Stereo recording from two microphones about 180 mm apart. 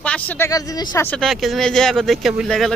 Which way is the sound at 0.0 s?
10° left (ahead or behind).